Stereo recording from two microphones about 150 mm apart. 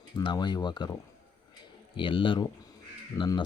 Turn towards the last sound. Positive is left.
turn(degrees=30)  # may be behind; listen again after turning